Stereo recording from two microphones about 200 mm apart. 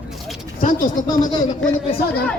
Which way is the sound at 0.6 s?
45° left (ahead or behind).